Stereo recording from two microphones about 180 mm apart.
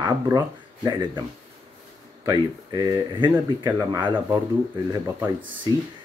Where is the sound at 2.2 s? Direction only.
20° right (ahead or behind).